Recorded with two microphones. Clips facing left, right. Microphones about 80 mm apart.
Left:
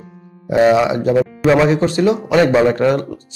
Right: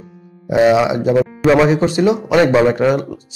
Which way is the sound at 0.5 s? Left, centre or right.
Centre.